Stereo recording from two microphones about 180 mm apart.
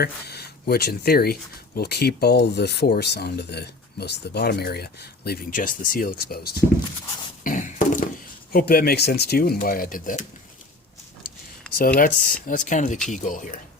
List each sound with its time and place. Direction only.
0.0 s speech: 65° left (ahead or behind)
7.4 s a sound: 45° left (ahead or behind)
8.5 s speech: 60° left (ahead or behind)
11.9 s speech: 50° left (ahead or behind)